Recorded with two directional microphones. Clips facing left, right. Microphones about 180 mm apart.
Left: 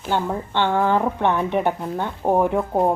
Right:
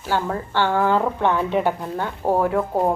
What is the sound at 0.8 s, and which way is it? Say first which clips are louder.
Speech: even; 15° left (ahead or behind).